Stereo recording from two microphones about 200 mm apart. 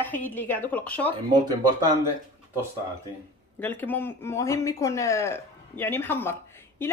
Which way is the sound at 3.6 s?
10° left (ahead or behind).